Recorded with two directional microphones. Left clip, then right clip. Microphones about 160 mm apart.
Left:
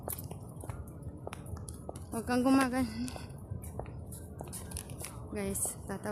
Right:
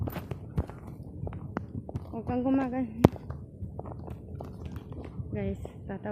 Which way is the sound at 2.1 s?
45° left (ahead or behind).